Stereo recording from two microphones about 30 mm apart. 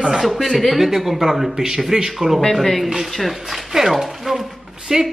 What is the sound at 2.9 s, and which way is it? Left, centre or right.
Speech, centre.